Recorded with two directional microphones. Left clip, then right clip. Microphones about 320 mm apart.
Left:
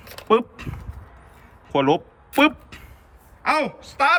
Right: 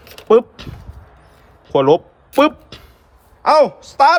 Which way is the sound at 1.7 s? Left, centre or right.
Centre.